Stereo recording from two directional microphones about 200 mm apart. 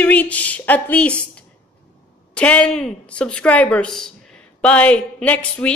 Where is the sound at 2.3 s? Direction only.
5° left (ahead or behind).